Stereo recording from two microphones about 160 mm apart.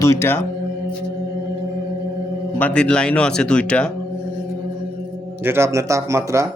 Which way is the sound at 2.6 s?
10° left (ahead or behind).